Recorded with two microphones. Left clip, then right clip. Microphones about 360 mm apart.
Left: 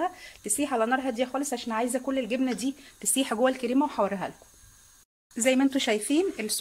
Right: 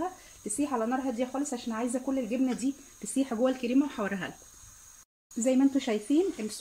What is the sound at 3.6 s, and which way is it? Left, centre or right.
Speech, centre.